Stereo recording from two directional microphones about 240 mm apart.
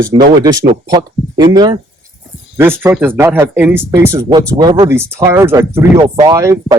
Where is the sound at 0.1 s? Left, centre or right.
Centre.